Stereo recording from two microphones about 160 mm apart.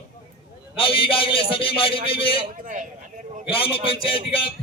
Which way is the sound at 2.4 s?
55° right (ahead or behind).